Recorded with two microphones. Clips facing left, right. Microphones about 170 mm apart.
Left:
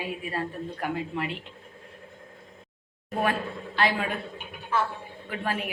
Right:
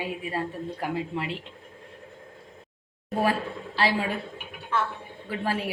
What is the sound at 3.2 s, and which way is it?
Speech, 30° right (ahead or behind).